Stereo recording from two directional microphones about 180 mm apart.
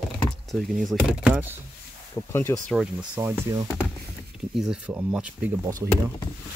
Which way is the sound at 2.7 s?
5° right (ahead or behind).